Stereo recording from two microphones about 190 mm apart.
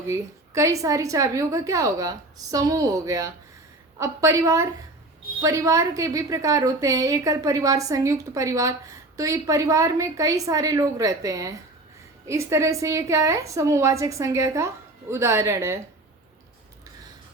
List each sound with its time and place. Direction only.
0.1 s a woman's voice: 15° right (ahead or behind)